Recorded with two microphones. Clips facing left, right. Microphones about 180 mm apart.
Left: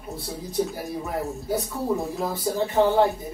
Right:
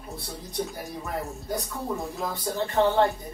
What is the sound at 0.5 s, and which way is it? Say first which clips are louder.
A woman's voice: left 6 dB; 5° left (ahead or behind).